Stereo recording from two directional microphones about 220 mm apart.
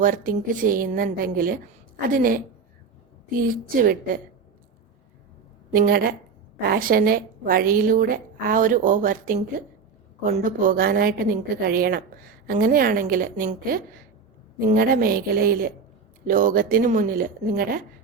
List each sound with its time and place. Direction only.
0.0 s a woman's voice: 40° right (ahead or behind)
3.8 s a woman's voice: 40° right (ahead or behind)
5.7 s a woman's voice: 40° right (ahead or behind)